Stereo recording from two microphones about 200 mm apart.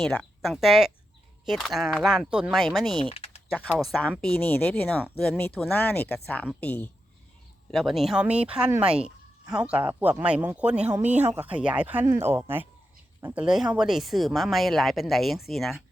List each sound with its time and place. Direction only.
0.0 s speech: 5° left (ahead or behind)
3.0 s typing: 30° left (ahead or behind)
3.5 s speech: centre (ahead or behind)